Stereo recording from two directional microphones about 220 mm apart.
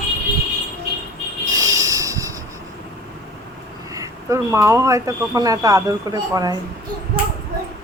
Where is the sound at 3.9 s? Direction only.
15° right (ahead or behind).